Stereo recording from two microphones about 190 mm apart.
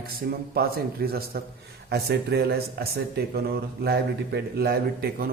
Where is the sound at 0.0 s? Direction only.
55° right (ahead or behind).